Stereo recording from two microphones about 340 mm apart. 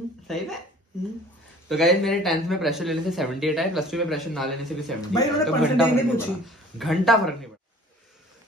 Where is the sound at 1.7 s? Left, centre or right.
Centre.